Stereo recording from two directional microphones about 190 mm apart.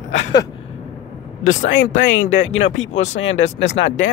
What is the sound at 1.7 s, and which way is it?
Speech, 90° left.